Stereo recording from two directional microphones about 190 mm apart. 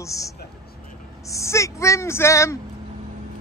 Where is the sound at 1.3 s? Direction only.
15° left (ahead or behind).